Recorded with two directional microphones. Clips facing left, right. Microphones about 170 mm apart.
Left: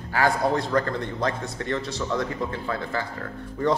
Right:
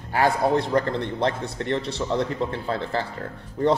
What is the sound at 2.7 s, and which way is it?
Speech, 30° right (ahead or behind).